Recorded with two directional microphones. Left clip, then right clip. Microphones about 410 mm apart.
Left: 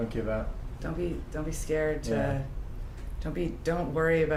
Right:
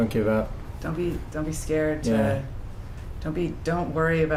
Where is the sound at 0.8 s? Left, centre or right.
Centre.